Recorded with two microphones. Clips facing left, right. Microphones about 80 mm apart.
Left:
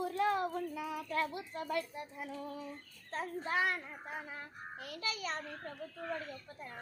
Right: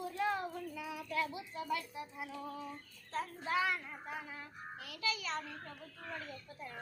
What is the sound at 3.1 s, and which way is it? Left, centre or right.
A child's voice, left.